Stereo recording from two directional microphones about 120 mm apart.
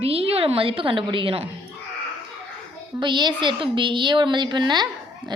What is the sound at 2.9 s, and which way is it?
A woman's voice, 40° right (ahead or behind).